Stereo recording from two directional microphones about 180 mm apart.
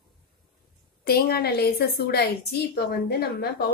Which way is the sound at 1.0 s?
60° left (ahead or behind).